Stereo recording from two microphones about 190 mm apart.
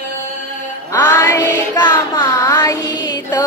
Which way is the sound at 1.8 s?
20° left (ahead or behind).